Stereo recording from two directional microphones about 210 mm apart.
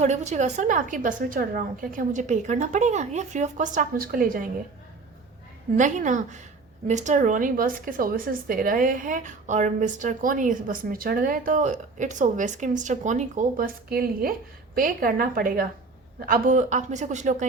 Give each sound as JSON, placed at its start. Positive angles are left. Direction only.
{"t": 0.0, "sound": "speech", "side_deg": -35}
{"t": 5.7, "sound": "a woman's voice", "side_deg": -35}